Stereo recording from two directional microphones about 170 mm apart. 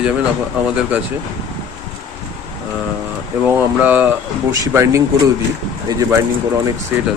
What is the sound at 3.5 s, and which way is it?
Speech, 10° right (ahead or behind).